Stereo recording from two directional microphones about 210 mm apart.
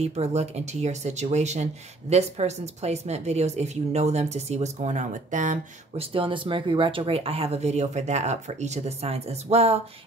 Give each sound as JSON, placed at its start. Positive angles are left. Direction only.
{"t": 0.0, "sound": "speech", "side_deg": -30}
{"t": 6.1, "sound": "speech", "side_deg": -25}